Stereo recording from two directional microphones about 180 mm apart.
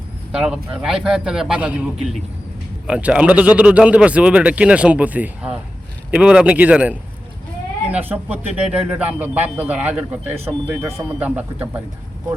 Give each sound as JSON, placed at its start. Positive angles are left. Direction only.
{"t": 0.3, "sound": "a man's voice", "side_deg": -5}